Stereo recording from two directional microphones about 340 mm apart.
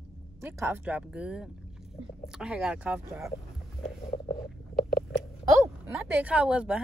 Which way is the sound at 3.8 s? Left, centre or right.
Centre.